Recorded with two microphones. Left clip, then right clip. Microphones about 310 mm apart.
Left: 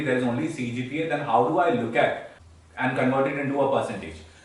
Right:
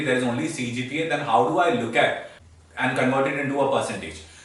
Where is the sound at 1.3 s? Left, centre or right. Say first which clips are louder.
Right 1 dB; left.